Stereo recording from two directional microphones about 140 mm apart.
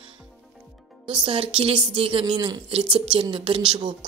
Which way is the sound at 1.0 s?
35° right (ahead or behind).